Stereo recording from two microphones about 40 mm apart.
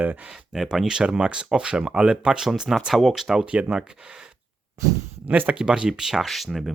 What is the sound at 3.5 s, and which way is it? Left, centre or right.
Speech, right.